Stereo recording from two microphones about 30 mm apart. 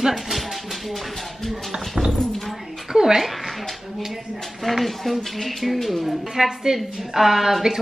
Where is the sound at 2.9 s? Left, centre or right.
Centre.